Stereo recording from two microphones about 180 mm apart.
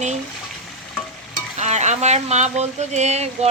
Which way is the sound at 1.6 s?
40° right (ahead or behind).